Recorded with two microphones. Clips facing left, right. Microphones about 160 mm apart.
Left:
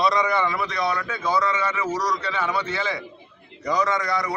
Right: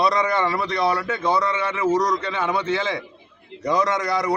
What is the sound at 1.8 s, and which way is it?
A man's voice, 25° right (ahead or behind).